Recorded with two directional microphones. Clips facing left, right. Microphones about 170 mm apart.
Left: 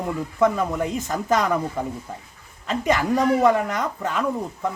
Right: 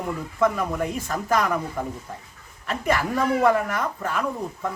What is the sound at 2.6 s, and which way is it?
Speech, 20° left (ahead or behind).